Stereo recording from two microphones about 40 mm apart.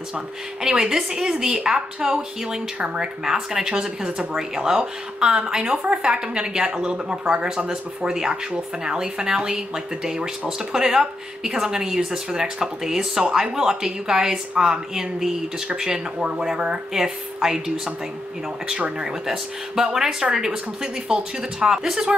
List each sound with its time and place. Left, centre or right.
0.1 s speech: centre
16.9 s speech: centre
19.2 s speech: centre